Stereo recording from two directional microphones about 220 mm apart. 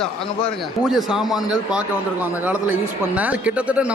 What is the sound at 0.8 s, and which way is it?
A man's voice, centre (ahead or behind).